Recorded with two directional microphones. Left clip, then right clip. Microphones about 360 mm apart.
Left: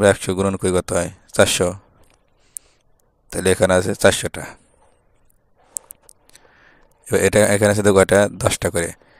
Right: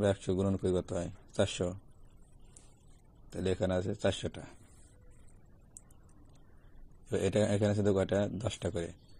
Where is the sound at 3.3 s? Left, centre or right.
Left.